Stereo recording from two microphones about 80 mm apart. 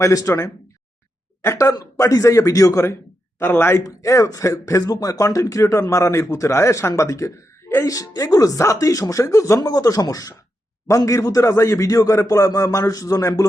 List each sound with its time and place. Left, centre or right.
0.0 s speech: left
1.4 s speech: left
3.8 s speech: left
9.6 s speech: left